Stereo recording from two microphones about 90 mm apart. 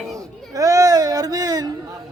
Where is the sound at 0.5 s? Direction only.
40° right (ahead or behind).